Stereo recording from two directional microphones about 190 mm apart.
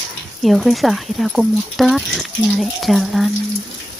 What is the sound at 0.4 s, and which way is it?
Speech, centre (ahead or behind).